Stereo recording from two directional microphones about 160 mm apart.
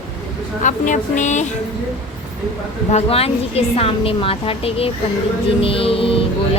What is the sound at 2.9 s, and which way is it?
Speech, 40° left (ahead or behind).